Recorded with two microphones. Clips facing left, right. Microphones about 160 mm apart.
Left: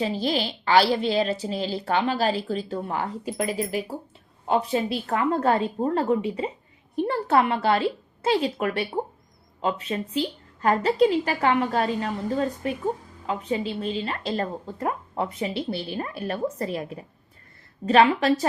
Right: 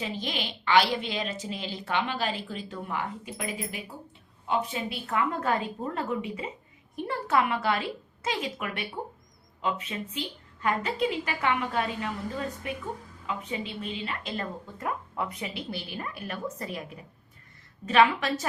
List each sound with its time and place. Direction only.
0.0 s a woman's voice: 35° left (ahead or behind)